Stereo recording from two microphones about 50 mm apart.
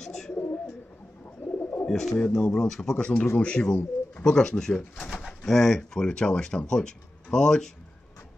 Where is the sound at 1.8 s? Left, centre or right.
Centre.